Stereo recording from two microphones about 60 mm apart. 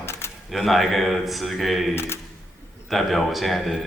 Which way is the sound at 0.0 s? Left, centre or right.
Left.